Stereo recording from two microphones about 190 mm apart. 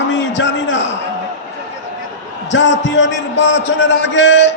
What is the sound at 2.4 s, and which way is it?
A man's voice, 70° left (ahead or behind).